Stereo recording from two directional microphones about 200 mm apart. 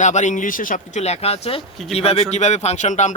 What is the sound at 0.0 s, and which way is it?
Speech, 35° left (ahead or behind).